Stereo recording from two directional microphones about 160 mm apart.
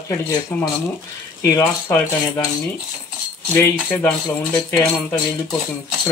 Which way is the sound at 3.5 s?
15° left (ahead or behind).